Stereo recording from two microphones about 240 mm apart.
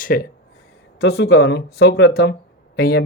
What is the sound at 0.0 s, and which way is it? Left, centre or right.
Speech, left.